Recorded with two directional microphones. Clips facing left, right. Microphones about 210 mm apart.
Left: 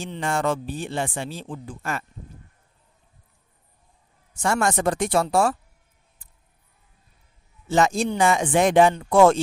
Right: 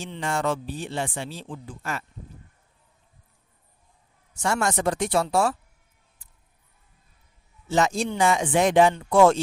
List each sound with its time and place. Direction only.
0.0 s speech: 50° left (ahead or behind)
4.4 s speech: 50° left (ahead or behind)
7.7 s speech: 50° left (ahead or behind)